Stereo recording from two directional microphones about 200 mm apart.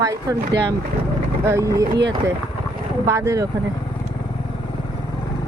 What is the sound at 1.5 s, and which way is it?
Speech, 15° right (ahead or behind).